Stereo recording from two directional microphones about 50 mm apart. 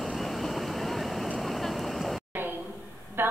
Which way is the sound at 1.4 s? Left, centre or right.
Centre.